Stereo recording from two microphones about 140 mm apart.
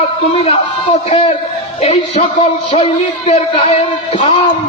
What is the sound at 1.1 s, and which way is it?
A man's voice, 45° left (ahead or behind).